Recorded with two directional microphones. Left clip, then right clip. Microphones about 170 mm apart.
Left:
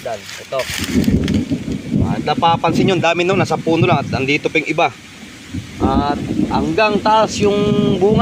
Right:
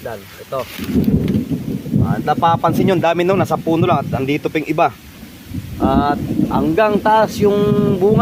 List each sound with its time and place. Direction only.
0.8 s speech: 60° left (ahead or behind)
2.0 s speech: 20° right (ahead or behind)
5.8 s speech: 60° right (ahead or behind); by 8.2 s 30° right (ahead or behind)